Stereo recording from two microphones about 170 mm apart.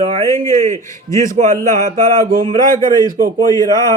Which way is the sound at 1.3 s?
50° right (ahead or behind).